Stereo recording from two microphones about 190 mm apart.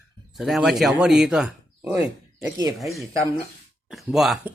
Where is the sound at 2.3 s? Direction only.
15° right (ahead or behind).